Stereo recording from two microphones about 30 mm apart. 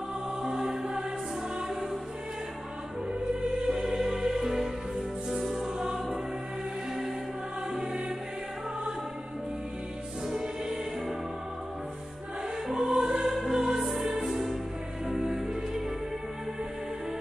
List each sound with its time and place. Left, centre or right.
0.4 s music: centre
3.3 s music: right
12.6 s music: centre
12.9 s music: right
13.2 s music: centre
13.5 s music: centre